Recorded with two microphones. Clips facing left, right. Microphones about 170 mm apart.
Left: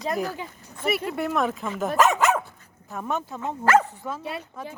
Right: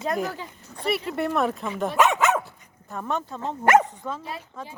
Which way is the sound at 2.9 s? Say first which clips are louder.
Even; 5° left (ahead or behind).